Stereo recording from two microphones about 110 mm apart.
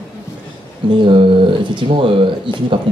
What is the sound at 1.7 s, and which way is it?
Speech, 50° right (ahead or behind).